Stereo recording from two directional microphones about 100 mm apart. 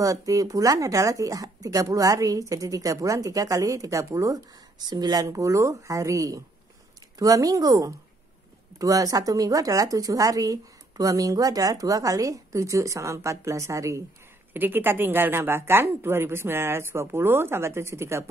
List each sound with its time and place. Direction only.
0.0 s speech: 35° right (ahead or behind)
14.5 s a woman's voice: 20° right (ahead or behind)